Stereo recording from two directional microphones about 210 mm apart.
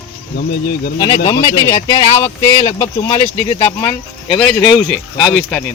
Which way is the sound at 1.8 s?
15° left (ahead or behind).